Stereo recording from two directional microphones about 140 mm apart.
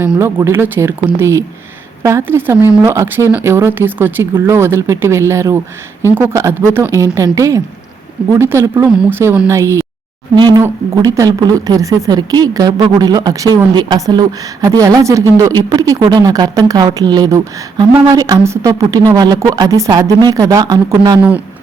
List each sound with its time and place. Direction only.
0.0 s a woman's voice: 15° right (ahead or behind)
10.3 s a woman's voice: 30° right (ahead or behind)